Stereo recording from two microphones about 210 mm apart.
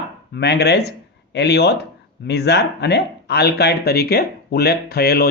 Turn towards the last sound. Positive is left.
turn(degrees=50)  # may be behind; listen again after turning